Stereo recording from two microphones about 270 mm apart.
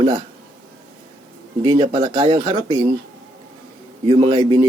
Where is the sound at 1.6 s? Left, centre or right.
Centre.